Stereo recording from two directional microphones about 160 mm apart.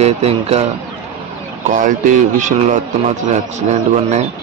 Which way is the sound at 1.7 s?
55° right (ahead or behind).